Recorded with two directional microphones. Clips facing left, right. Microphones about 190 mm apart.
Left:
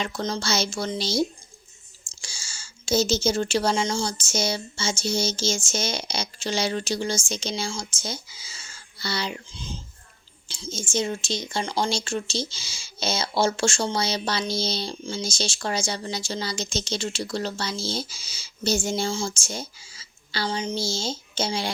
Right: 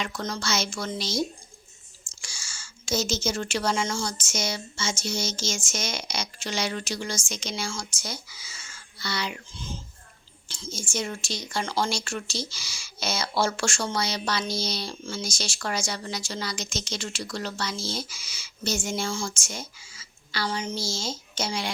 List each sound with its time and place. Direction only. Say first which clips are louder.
0.0 s speech: left 3 dB; 25° left (ahead or behind)
2.2 s a sound: left 1 dB; 30° left (ahead or behind)
3.8 s speech: left 3 dB; 25° left (ahead or behind)
9.5 s speech: even; 15° left (ahead or behind)